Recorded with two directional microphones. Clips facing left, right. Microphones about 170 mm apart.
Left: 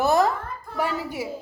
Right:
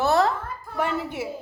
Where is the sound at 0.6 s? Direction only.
Centre (ahead or behind).